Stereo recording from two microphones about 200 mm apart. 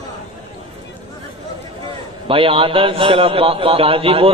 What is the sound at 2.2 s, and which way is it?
Speech, 25° right (ahead or behind).